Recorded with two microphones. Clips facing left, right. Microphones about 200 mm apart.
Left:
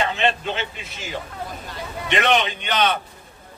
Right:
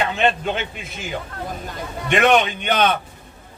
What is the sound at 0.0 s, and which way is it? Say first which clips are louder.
A man's voice: right 2 dB; 50° right (ahead or behind).